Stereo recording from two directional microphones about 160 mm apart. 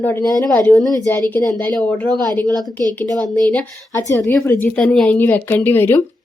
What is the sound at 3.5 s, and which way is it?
Speech, 15° left (ahead or behind).